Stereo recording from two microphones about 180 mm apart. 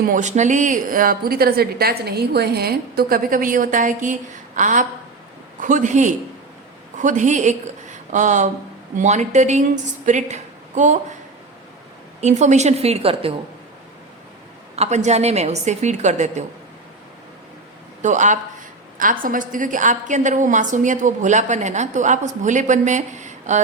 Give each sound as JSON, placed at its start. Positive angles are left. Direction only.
{"t": 0.1, "sound": "a woman's voice", "side_deg": -40}
{"t": 12.2, "sound": "a woman's voice", "side_deg": -40}
{"t": 14.8, "sound": "a woman's voice", "side_deg": -40}
{"t": 18.0, "sound": "a woman's voice", "side_deg": -40}